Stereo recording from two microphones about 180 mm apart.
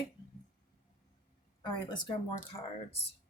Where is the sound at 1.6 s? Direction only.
25° left (ahead or behind).